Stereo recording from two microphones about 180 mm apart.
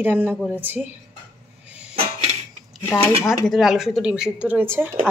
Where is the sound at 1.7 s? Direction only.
5° right (ahead or behind).